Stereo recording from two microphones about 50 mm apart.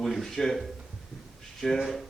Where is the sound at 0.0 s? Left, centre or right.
Centre.